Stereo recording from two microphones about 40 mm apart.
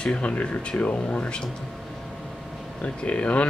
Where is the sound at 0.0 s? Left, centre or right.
Left.